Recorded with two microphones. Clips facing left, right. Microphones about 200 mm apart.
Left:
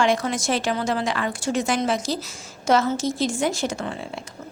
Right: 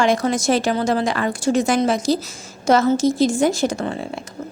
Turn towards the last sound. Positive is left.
turn(degrees=-40)  # may be behind; listen again after turning